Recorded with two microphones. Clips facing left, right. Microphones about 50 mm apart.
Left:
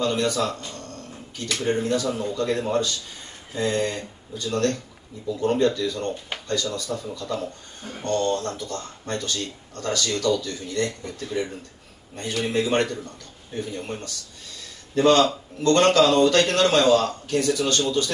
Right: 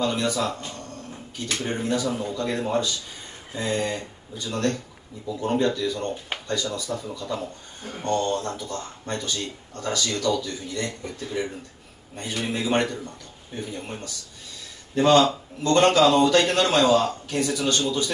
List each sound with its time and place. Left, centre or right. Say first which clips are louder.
0.0 s speech: left 1 dB; centre
12.4 s speech: left 1 dB; centre